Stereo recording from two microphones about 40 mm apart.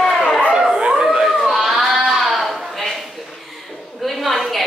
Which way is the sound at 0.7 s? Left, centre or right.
Right.